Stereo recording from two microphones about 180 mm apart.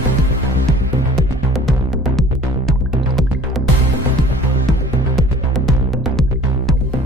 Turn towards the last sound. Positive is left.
turn(degrees=0)  # may be behind; listen again after turning